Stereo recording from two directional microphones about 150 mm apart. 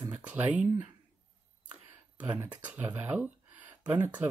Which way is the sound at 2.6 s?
10° right (ahead or behind).